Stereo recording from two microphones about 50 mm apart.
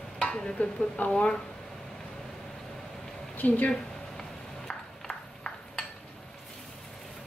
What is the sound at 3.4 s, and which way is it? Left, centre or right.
Speech, left.